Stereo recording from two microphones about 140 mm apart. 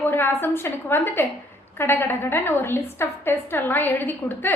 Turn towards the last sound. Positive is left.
turn(degrees=15)  # may be behind; listen again after turning